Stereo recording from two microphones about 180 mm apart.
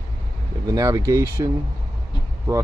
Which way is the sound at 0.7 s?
20° right (ahead or behind).